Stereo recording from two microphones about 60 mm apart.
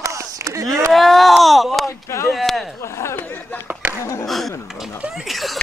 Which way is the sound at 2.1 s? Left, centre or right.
Left.